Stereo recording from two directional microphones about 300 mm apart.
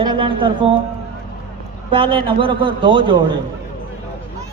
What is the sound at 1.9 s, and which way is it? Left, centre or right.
Speech, centre.